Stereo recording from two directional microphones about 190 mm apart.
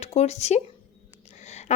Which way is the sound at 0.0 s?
35° left (ahead or behind).